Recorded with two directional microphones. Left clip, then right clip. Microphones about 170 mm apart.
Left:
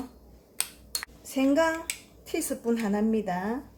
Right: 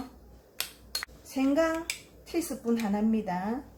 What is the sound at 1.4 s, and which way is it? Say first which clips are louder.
A woman's voice: left 2 dB; 50° left (ahead or behind).